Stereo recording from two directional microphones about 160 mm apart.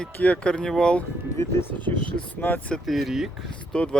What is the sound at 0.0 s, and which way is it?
Speech, 10° left (ahead or behind).